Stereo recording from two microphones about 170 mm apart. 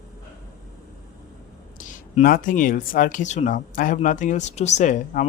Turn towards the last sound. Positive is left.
turn(degrees=45)  # may be behind; listen again after turning